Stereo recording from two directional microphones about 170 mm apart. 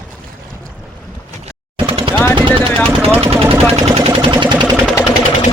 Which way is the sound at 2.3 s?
30° right (ahead or behind).